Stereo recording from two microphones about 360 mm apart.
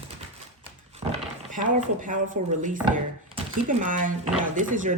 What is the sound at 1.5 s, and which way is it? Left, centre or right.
Speech, right.